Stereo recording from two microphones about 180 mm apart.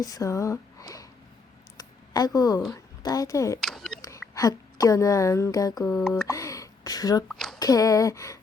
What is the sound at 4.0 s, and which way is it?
A woman's voice, 20° left (ahead or behind).